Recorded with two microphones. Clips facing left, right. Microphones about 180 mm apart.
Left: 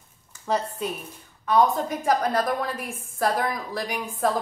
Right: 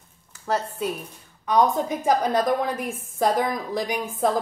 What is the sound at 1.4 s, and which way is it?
A woman's voice, 20° right (ahead or behind).